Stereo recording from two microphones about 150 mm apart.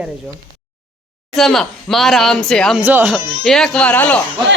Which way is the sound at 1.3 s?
Centre (ahead or behind).